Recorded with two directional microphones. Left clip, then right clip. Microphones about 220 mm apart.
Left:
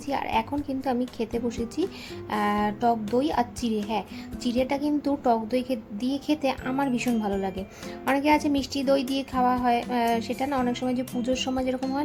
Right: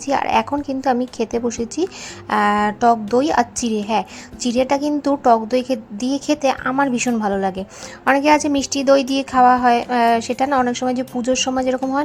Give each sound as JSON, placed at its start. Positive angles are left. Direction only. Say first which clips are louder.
{"t": 0.0, "sound": "a woman's voice", "louder": "right 9 dB", "side_deg": -15}